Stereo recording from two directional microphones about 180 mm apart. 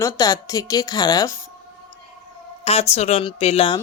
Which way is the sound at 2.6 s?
35° left (ahead or behind).